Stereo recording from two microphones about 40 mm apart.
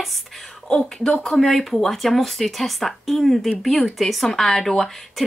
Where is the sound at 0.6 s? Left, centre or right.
Centre.